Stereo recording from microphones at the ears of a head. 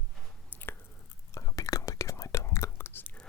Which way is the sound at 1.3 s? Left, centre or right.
Left.